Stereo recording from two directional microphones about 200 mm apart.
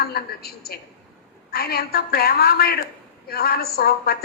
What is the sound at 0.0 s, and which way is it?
A woman's voice, 50° left (ahead or behind).